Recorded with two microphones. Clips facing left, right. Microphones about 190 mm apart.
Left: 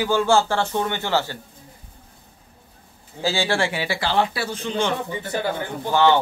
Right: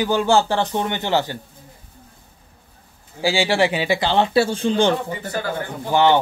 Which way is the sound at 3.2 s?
15° right (ahead or behind).